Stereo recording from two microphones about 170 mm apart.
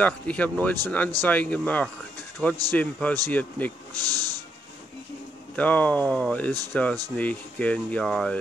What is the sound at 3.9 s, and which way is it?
Speech, 20° right (ahead or behind).